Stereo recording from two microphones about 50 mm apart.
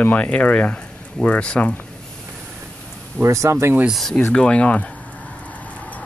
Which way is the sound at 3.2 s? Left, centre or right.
Right.